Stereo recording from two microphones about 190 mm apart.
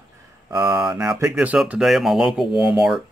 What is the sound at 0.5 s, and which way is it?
Speech, 20° right (ahead or behind).